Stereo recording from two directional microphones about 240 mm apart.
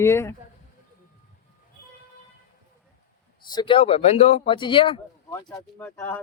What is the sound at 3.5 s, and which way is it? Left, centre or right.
Speech, centre.